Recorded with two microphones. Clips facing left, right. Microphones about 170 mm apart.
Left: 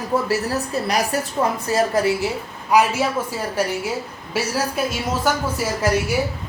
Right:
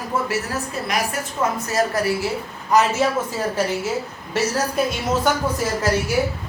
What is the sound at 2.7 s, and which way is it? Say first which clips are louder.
Speech: even; 10° left (ahead or behind).